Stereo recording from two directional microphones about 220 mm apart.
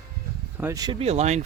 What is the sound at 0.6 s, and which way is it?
Speech, 15° right (ahead or behind).